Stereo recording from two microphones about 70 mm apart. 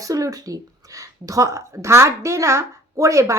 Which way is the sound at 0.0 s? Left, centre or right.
Right.